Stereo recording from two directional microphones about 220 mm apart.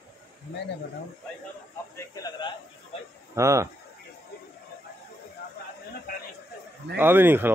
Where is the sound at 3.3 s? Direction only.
15° right (ahead or behind).